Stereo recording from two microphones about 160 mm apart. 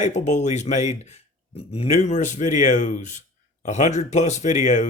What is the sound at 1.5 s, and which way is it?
Speech, 35° left (ahead or behind).